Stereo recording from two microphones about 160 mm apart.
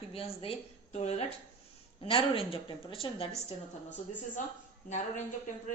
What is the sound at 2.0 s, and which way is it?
A man's voice, 35° left (ahead or behind).